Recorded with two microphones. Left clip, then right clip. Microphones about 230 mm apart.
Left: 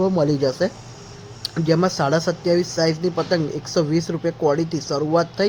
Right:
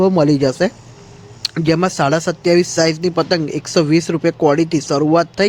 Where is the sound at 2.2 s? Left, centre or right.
Right.